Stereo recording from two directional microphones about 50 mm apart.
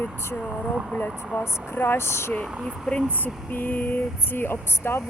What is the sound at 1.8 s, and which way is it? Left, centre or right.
Speech, left.